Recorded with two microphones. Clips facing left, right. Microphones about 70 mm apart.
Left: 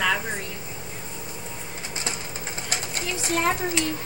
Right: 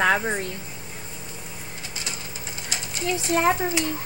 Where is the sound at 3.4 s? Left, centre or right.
Centre.